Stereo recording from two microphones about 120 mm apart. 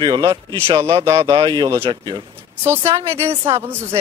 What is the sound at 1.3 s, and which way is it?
Speech, 40° right (ahead or behind).